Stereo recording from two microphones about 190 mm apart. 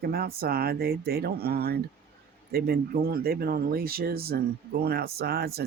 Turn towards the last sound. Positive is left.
turn(degrees=-55)  # may be behind; listen again after turning